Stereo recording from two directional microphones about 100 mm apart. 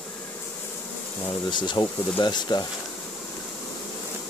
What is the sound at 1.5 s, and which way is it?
Speech, 50° left (ahead or behind).